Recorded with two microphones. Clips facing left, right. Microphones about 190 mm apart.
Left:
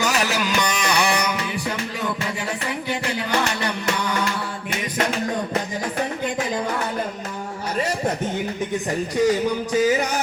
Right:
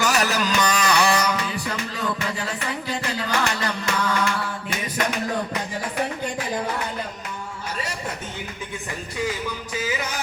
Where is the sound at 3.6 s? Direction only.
20° left (ahead or behind).